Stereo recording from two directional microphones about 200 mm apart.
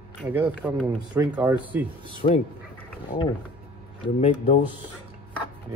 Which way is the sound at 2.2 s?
40° left (ahead or behind).